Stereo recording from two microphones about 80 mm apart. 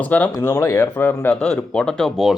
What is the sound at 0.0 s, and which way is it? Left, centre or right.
Speech, centre.